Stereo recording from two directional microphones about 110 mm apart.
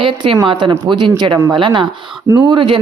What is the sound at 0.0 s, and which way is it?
A woman's voice, 50° right (ahead or behind).